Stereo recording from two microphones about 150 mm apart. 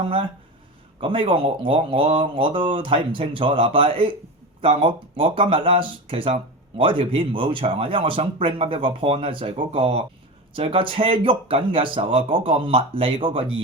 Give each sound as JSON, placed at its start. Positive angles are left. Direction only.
{"t": 0.0, "sound": "speech", "side_deg": -35}